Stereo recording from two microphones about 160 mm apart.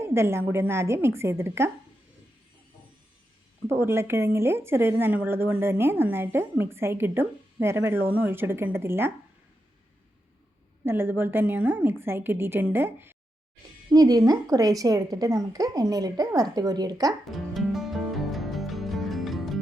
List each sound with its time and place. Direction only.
0.0 s speech: 15° right (ahead or behind)
3.7 s speech: 15° right (ahead or behind)
10.8 s a woman's voice: 15° right (ahead or behind)
17.3 s music: centre (ahead or behind)